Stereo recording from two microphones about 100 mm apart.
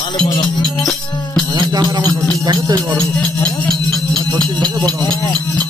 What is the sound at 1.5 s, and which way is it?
Music, 45° right (ahead or behind).